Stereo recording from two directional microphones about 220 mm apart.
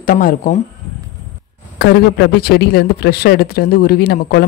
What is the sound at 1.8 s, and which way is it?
Speech, 50° left (ahead or behind).